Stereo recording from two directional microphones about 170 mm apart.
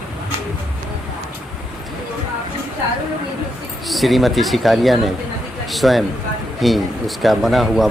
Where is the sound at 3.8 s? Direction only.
Centre (ahead or behind).